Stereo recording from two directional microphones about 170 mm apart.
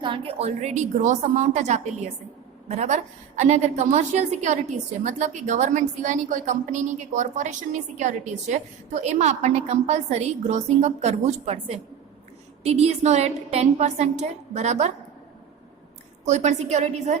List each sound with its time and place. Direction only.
0.0 s a woman's voice: 30° right (ahead or behind)
16.2 s a woman's voice: 45° right (ahead or behind)